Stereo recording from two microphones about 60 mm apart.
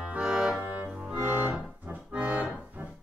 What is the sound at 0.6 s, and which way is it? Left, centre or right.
Music, right.